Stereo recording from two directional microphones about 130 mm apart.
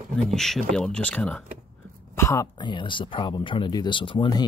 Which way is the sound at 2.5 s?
35° left (ahead or behind).